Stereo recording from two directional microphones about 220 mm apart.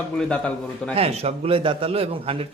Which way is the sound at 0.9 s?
25° right (ahead or behind).